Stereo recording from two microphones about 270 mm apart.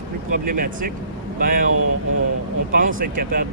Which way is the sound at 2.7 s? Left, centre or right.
Right.